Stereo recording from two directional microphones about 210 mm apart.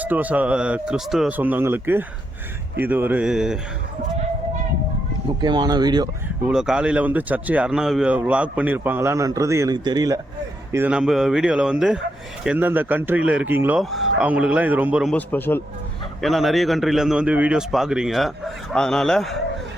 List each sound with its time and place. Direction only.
0.0 s a man's voice: 5° right (ahead or behind)
5.4 s speech: 20° right (ahead or behind)
6.5 s a man's voice: 5° right (ahead or behind)
15.1 s a man's voice: 10° left (ahead or behind)